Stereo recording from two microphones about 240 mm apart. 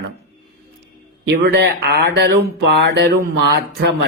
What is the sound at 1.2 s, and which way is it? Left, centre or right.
Speech, right.